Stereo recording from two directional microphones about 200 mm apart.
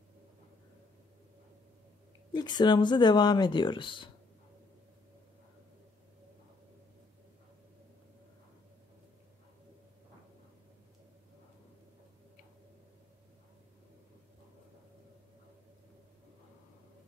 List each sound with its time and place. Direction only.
2.3 s speech: 20° left (ahead or behind)